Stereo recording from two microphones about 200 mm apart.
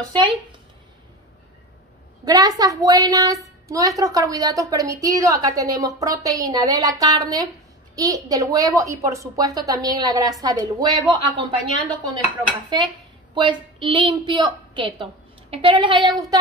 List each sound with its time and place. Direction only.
0.1 s a woman's voice: 25° right (ahead or behind)
2.2 s a woman's voice: 20° right (ahead or behind)
12.6 s a woman's voice: 25° right (ahead or behind)